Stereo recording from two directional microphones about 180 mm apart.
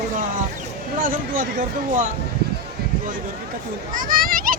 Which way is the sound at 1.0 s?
45° right (ahead or behind).